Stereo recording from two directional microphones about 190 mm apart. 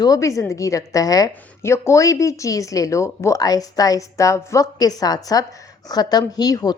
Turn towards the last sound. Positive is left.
turn(degrees=20)  # may be behind; listen again after turning